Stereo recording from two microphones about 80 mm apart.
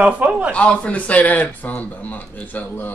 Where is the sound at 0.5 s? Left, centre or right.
Centre.